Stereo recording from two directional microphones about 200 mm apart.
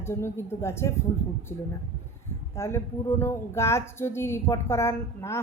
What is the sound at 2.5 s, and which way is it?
Speech, 15° left (ahead or behind).